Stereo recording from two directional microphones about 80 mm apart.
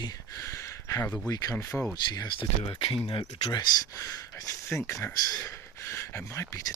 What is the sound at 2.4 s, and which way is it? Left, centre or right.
Speech, left.